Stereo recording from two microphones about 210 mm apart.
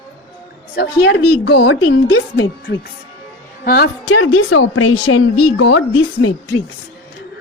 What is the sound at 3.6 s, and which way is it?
Speech, 45° left (ahead or behind).